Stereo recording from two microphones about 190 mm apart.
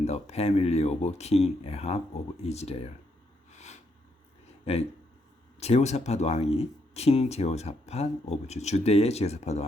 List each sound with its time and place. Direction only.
0.0 s speech: 35° left (ahead or behind)
3.5 s a sound: 35° left (ahead or behind)
4.6 s speech: 30° left (ahead or behind)